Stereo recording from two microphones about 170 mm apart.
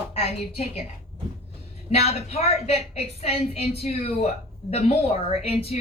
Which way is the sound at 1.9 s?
35° left (ahead or behind).